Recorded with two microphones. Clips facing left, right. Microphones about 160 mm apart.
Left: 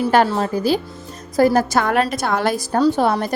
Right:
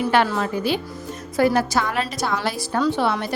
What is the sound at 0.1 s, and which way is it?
A woman's voice, 40° left (ahead or behind).